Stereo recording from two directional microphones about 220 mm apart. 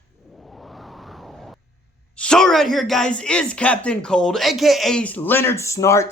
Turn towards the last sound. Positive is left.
turn(degrees=15)  # may be behind; listen again after turning